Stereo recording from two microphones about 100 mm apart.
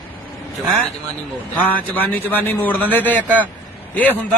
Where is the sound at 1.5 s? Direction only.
15° left (ahead or behind).